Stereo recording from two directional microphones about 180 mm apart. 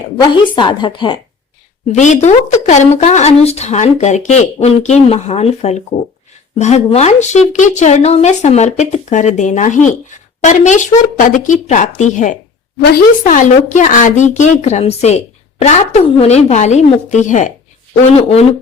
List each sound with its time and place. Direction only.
0.2 s a woman's voice: 25° left (ahead or behind)
1.9 s speech: 40° left (ahead or behind)
12.8 s speech: 55° left (ahead or behind)